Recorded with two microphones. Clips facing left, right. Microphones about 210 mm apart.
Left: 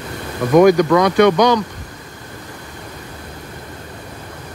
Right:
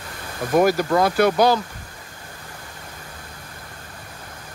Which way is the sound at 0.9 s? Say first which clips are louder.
Left 6 dB; 85° left.